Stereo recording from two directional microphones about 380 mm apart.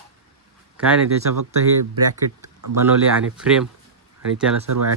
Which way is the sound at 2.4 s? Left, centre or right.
Right.